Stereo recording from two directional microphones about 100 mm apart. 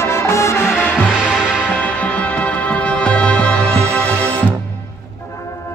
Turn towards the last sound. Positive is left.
turn(degrees=15)  # may be behind; listen again after turning